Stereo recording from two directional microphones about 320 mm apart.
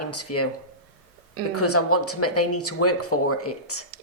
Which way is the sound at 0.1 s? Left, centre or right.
Left.